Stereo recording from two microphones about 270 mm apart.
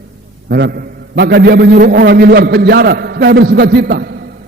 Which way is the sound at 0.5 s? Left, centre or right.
Right.